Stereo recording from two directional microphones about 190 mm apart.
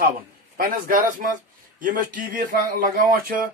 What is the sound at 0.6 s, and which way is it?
A man's voice, 45° right (ahead or behind).